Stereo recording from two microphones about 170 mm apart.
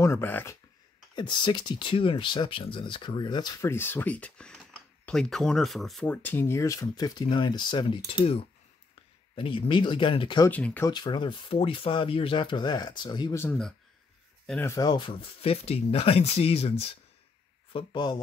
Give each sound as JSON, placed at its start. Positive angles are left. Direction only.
{"t": 0.0, "sound": "speech", "side_deg": 15}
{"t": 1.1, "sound": "speech", "side_deg": 25}
{"t": 3.7, "sound": "speech", "side_deg": 15}
{"t": 10.5, "sound": "speech", "side_deg": 10}
{"t": 10.9, "sound": "speech", "side_deg": 25}
{"t": 13.4, "sound": "speech", "side_deg": 5}
{"t": 14.4, "sound": "a sound", "side_deg": 5}
{"t": 14.7, "sound": "speech", "side_deg": 20}
{"t": 17.7, "sound": "speech", "side_deg": 25}